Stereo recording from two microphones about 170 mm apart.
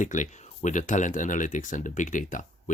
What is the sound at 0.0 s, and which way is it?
Speech, 45° left (ahead or behind).